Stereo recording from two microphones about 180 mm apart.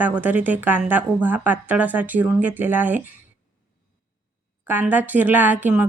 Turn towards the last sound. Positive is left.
turn(degrees=-10)  # may be behind; listen again after turning